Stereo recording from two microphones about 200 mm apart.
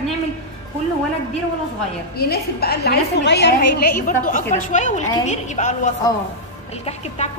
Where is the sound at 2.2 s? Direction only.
50° left (ahead or behind).